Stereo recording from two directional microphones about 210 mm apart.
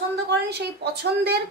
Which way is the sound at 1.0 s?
50° right (ahead or behind).